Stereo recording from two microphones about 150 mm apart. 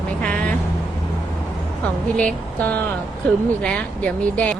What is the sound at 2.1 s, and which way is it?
Speech, 10° left (ahead or behind).